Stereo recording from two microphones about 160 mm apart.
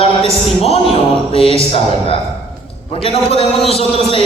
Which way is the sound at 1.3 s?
35° left (ahead or behind).